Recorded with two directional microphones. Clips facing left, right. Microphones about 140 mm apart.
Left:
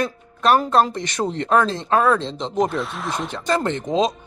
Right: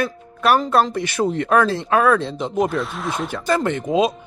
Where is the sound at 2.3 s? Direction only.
5° right (ahead or behind).